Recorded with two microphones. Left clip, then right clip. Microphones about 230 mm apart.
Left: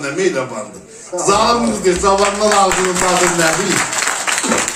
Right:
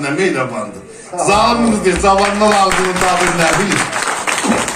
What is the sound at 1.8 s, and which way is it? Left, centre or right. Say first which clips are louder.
Speech: right 1 dB; left.